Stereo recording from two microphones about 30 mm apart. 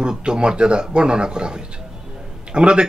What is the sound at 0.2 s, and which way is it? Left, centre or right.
Speech, right.